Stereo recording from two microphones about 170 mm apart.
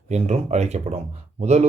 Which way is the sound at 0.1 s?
40° right (ahead or behind).